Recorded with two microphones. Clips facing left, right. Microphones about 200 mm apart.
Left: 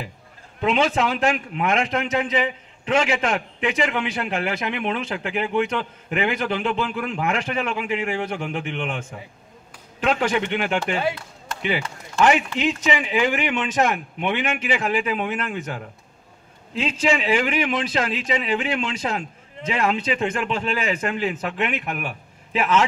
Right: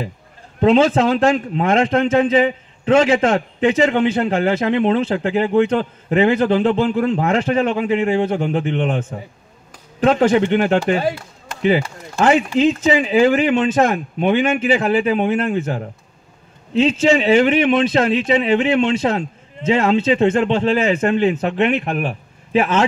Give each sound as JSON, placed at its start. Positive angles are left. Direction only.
{"t": 0.6, "sound": "a man's voice", "side_deg": -30}
{"t": 12.5, "sound": "a man's voice", "side_deg": -30}